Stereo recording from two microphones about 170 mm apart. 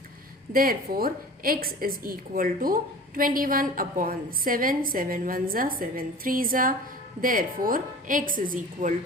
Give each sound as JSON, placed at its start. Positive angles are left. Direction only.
{"t": 0.5, "sound": "a woman's voice", "side_deg": -60}